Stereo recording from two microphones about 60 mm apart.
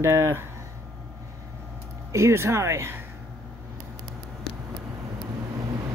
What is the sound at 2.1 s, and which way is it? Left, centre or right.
Speech, right.